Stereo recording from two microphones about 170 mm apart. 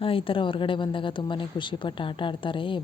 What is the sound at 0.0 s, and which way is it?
A woman's voice, 30° left (ahead or behind).